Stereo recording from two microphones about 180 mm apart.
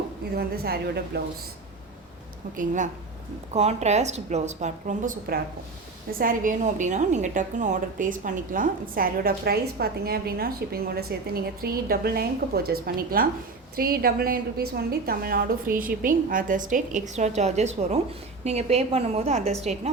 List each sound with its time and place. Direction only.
0.3 s a woman's voice: 60° right (ahead or behind)
2.6 s a woman's voice: 45° right (ahead or behind)